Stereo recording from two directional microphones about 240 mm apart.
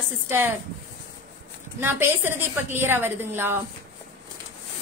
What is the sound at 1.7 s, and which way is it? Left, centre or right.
A woman's voice, centre.